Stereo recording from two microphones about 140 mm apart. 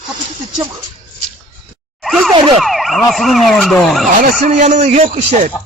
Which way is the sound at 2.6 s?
Centre (ahead or behind).